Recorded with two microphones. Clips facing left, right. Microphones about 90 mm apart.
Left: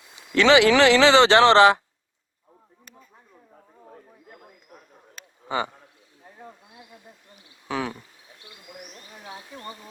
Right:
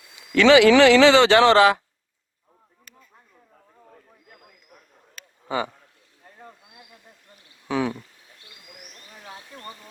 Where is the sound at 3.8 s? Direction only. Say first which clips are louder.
Left 5 dB; 20° left (ahead or behind).